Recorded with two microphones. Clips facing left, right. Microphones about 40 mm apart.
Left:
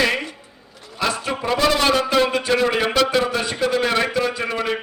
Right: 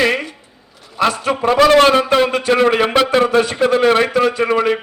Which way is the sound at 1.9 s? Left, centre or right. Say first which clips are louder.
Right 4 dB; right.